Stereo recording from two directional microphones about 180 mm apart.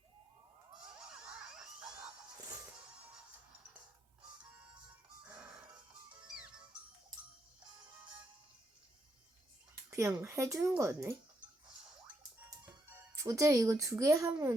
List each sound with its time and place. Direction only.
0.9 s music: 5° right (ahead or behind)
9.9 s speech: 15° right (ahead or behind)
12.9 s speech: 20° right (ahead or behind)